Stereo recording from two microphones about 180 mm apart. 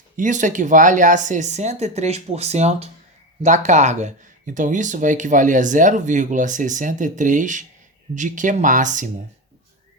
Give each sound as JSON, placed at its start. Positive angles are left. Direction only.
{"t": 0.2, "sound": "speech", "side_deg": -45}